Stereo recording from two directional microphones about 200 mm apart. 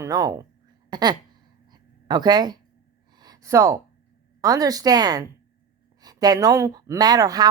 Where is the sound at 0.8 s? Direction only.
20° right (ahead or behind).